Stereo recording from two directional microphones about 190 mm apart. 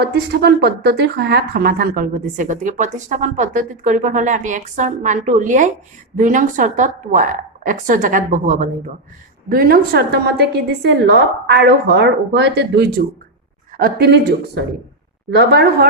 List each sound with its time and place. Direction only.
0.0 s a woman's voice: 60° right (ahead or behind)